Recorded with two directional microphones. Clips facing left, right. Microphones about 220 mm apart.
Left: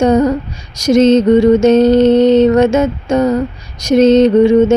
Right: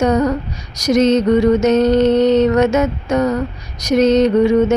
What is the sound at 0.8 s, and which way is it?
Mantra, 25° left (ahead or behind).